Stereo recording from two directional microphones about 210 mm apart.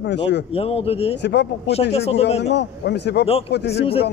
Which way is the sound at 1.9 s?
30° left (ahead or behind).